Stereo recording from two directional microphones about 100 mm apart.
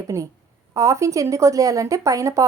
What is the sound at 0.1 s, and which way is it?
A woman's voice, 25° right (ahead or behind).